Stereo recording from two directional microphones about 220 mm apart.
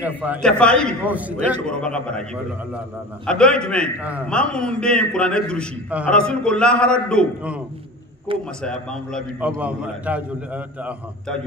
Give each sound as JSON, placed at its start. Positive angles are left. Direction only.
{"t": 0.0, "sound": "a man's voice", "side_deg": -5}
{"t": 0.4, "sound": "a man's voice", "side_deg": 5}
{"t": 1.0, "sound": "a man's voice", "side_deg": -5}
{"t": 1.7, "sound": "a man's voice", "side_deg": 5}
{"t": 3.3, "sound": "a man's voice", "side_deg": 5}
{"t": 8.3, "sound": "a man's voice", "side_deg": -25}
{"t": 8.6, "sound": "a man's voice", "side_deg": 0}